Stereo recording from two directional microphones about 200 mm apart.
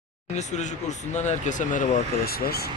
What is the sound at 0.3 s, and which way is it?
Speech, 35° left (ahead or behind).